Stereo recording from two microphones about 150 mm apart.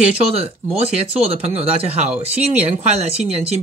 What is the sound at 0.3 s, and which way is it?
Speech, 40° right (ahead or behind).